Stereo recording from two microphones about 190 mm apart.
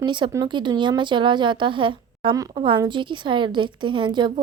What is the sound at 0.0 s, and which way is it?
Speech, 25° right (ahead or behind).